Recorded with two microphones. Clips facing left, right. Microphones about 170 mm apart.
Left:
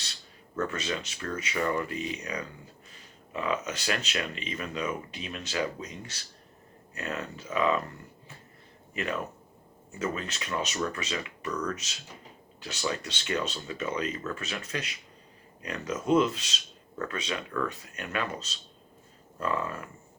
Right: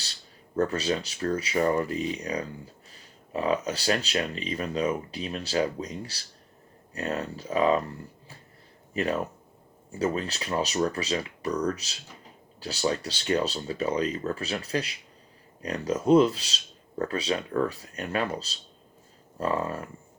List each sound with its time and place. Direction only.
0.5 s speech: 35° right (ahead or behind)